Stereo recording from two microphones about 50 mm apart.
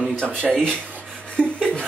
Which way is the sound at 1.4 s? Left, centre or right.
Right.